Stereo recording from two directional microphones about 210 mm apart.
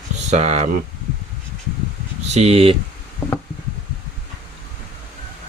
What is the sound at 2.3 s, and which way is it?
Speech, 30° right (ahead or behind).